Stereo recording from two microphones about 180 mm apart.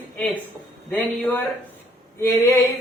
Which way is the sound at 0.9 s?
10° left (ahead or behind).